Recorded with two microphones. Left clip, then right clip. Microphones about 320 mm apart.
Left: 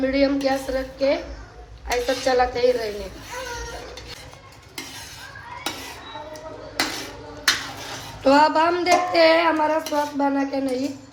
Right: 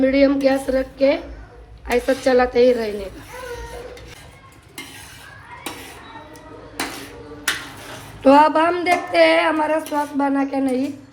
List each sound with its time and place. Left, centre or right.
0.0 s a woman's voice: right
8.2 s a woman's voice: right